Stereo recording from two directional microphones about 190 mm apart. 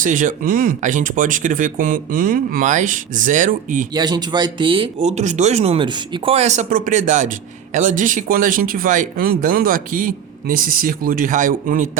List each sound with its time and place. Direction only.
0.0 s speech: 45° right (ahead or behind)
3.9 s speech: 20° right (ahead or behind); by 11.9 s 45° right (ahead or behind)